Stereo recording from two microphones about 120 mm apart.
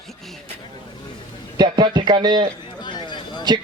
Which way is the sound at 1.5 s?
40° right (ahead or behind).